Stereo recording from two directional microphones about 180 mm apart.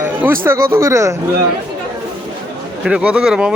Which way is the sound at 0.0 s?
10° right (ahead or behind).